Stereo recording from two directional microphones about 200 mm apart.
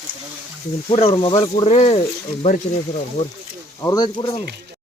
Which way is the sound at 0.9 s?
25° left (ahead or behind).